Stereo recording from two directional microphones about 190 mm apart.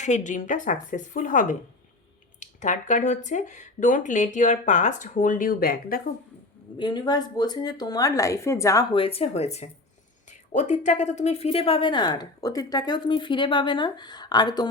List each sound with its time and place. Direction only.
0.0 s a woman's voice: 40° left (ahead or behind)
6.7 s speech: 25° left (ahead or behind)